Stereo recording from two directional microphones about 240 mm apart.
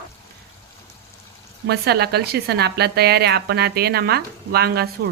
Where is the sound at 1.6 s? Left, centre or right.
Right.